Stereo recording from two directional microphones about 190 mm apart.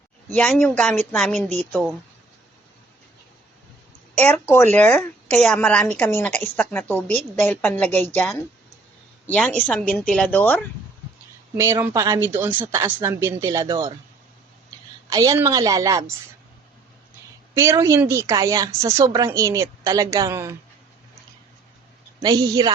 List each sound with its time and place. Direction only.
0.3 s speech: 5° left (ahead or behind)
4.2 s a woman's voice: 10° left (ahead or behind)
11.6 s a woman's voice: 15° right (ahead or behind)
15.1 s a woman's voice: 20° right (ahead or behind)
17.5 s a woman's voice: 15° right (ahead or behind)
22.2 s a woman's voice: 20° right (ahead or behind)